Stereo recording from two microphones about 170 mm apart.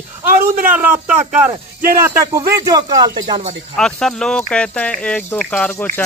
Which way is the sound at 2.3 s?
20° right (ahead or behind).